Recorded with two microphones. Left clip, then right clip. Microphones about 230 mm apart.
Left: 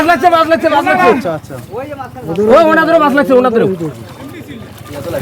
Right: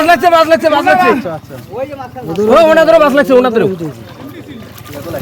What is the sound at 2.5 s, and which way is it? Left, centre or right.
A man's voice, right.